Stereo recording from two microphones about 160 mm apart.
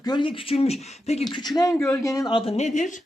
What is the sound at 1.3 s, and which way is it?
Speech, 25° left (ahead or behind).